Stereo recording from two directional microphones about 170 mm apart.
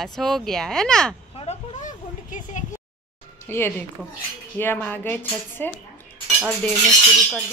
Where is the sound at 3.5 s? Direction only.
15° left (ahead or behind).